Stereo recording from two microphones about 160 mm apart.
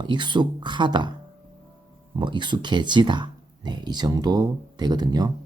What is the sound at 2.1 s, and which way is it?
Speech, 30° right (ahead or behind).